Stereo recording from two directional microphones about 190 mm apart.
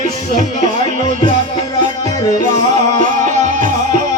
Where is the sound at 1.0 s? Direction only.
40° right (ahead or behind).